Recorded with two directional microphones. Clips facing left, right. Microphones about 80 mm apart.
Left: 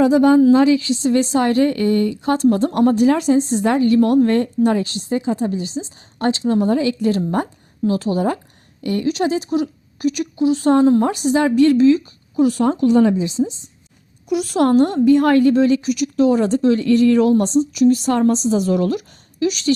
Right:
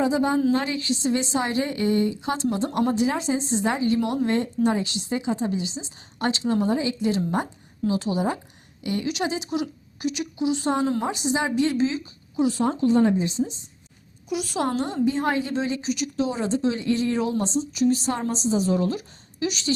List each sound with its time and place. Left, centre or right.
0.0 s a woman's voice: left
0.6 s a woman's voice: left
1.1 s a woman's voice: left
6.7 s a woman's voice: left
7.9 s a woman's voice: left
14.3 s a woman's voice: left
16.8 s a woman's voice: left
19.4 s a woman's voice: left